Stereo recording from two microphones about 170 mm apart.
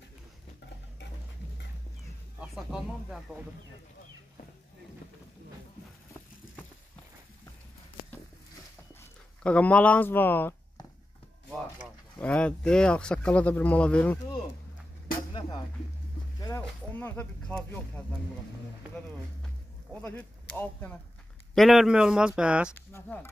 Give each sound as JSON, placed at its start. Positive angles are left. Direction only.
{"t": 2.4, "sound": "speech", "side_deg": 0}
{"t": 9.4, "sound": "speech", "side_deg": 10}
{"t": 12.2, "sound": "speech", "side_deg": 5}
{"t": 16.3, "sound": "a sound", "side_deg": 20}
{"t": 16.9, "sound": "speech", "side_deg": 10}
{"t": 19.9, "sound": "speech", "side_deg": 10}
{"t": 21.5, "sound": "speech", "side_deg": 0}
{"t": 22.8, "sound": "speech", "side_deg": 10}